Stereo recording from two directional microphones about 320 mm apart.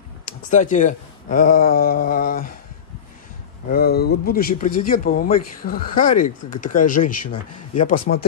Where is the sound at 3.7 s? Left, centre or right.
Left.